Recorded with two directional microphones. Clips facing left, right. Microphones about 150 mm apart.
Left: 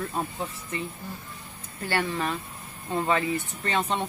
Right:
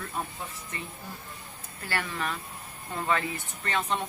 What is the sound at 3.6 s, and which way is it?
Speech, 30° left (ahead or behind).